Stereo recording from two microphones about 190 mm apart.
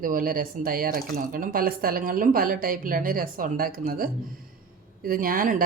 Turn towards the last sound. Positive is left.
turn(degrees=-50)  # may be behind; listen again after turning